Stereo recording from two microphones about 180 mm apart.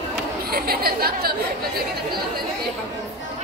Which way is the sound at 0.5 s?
55° right (ahead or behind).